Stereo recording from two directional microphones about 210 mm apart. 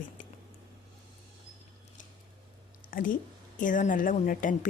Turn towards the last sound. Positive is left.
turn(degrees=40)  # may be behind; listen again after turning